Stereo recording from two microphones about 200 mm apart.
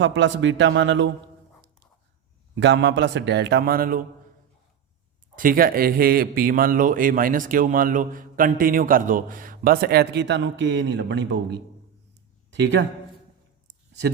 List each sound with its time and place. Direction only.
0.0 s a man's voice: 65° right (ahead or behind)
2.6 s a man's voice: 60° right (ahead or behind)
5.4 s speech: 45° right (ahead or behind); by 12.8 s 60° right (ahead or behind)